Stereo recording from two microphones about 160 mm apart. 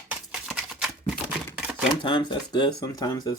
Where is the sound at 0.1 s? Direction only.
5° right (ahead or behind).